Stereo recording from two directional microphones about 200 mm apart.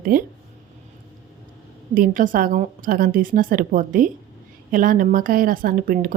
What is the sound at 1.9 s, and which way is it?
Speech, 40° right (ahead or behind).